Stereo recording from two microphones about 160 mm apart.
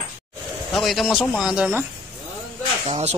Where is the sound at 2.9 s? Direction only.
40° right (ahead or behind).